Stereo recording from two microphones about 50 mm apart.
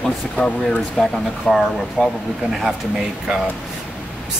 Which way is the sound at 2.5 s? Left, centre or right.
Centre.